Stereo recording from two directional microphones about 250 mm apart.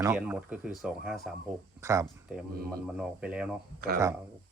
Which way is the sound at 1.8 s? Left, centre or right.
Centre.